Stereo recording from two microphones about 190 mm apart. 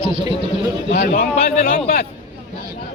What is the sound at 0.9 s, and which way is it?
Speech, 50° left (ahead or behind).